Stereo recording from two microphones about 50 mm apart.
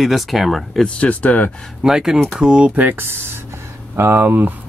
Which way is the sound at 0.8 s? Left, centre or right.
Left.